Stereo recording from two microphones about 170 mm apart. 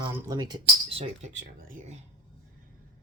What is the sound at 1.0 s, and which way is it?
Speech, 45° right (ahead or behind).